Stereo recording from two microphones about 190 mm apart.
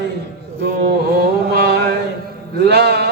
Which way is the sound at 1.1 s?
60° right (ahead or behind).